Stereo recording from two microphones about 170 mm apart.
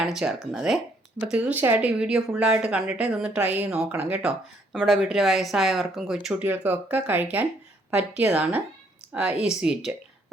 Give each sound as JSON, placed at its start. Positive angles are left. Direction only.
{"t": 0.0, "sound": "speech", "side_deg": 0}